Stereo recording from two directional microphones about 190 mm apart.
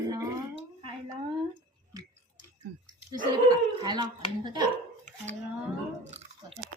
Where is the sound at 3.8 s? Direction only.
20° right (ahead or behind).